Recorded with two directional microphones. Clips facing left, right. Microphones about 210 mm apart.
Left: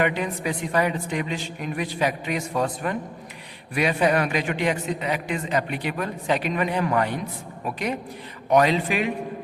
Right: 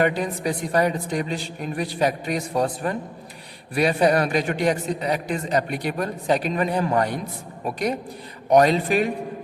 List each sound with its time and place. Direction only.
0.0 s a man's voice: 40° right (ahead or behind)
8.5 s a man's voice: 40° right (ahead or behind)